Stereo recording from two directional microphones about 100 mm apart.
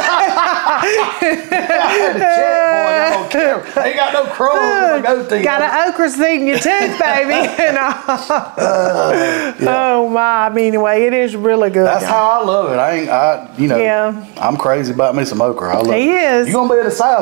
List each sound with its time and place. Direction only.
0.0 s speech: 20° right (ahead or behind)